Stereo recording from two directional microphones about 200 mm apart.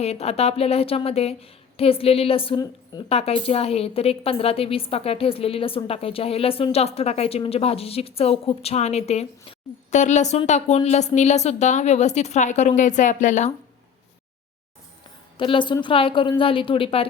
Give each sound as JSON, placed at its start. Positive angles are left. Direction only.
{"t": 0.0, "sound": "a woman's voice", "side_deg": 30}
{"t": 15.4, "sound": "a woman's voice", "side_deg": 25}